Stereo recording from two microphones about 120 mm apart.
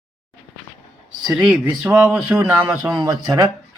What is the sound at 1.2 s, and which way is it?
Speech, 5° right (ahead or behind).